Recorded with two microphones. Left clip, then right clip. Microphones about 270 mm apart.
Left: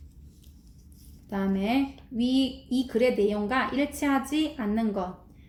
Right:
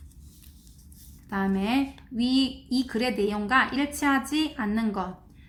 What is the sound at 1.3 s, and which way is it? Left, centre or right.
Speech, right.